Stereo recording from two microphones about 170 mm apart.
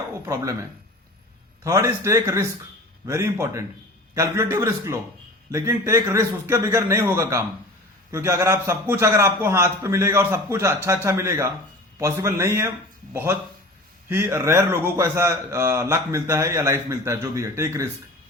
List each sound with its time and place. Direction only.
1.6 s a man's voice: 20° right (ahead or behind)
14.1 s a man's voice: 15° right (ahead or behind)